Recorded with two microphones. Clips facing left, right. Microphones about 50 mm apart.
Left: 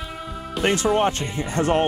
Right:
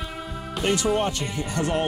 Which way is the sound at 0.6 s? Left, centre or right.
Left.